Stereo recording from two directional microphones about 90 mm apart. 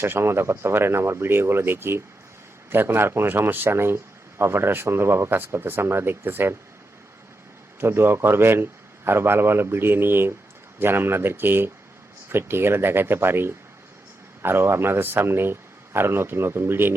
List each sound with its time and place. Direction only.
0.0 s speech: 25° right (ahead or behind)
7.8 s speech: 25° right (ahead or behind)